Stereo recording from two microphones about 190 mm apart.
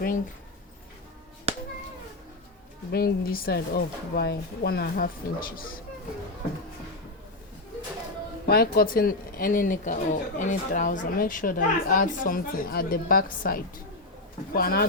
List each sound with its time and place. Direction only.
2.9 s speech: 50° left (ahead or behind)
8.4 s speech: 55° left (ahead or behind)